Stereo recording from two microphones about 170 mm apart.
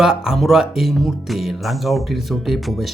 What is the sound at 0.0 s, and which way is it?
Speech, 5° right (ahead or behind).